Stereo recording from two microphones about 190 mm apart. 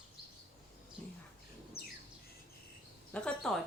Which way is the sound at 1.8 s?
55° left (ahead or behind).